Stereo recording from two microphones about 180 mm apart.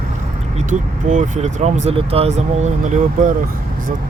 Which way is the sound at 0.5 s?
40° right (ahead or behind).